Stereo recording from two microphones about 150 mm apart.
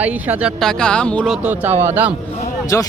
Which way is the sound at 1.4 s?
10° right (ahead or behind).